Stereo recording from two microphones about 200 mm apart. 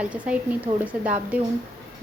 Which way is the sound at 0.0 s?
5° right (ahead or behind).